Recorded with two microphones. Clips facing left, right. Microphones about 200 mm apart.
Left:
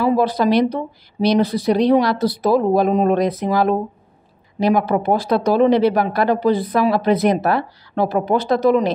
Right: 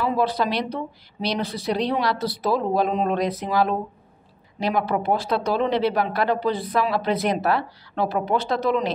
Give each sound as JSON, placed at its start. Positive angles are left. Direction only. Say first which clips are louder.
{"t": 0.0, "sound": "speech", "louder": "left 6 dB", "side_deg": 40}